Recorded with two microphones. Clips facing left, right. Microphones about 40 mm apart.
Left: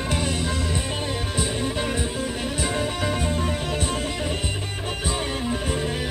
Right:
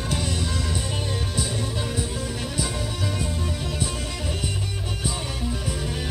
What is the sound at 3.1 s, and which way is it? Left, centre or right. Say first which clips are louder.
Music: left 4 dB; left.